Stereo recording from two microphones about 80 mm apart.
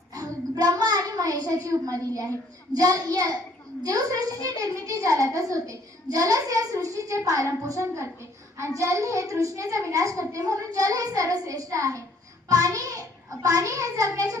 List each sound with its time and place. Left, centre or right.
0.1 s a sound: right
2.7 s a child's voice: right
4.4 s a child's voice: right